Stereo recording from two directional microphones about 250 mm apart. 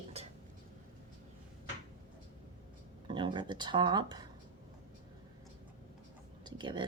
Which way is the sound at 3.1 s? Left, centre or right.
Centre.